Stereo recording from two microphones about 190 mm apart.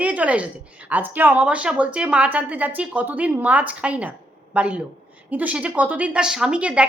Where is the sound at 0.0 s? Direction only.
5° right (ahead or behind).